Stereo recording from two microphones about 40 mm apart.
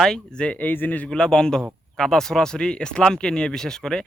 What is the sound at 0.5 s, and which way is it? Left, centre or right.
Speech, left.